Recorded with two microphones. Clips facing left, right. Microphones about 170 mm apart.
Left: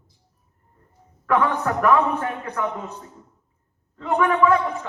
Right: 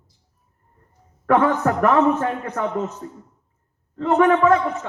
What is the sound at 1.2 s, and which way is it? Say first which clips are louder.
A man's voice: right 4 dB; 50° right (ahead or behind).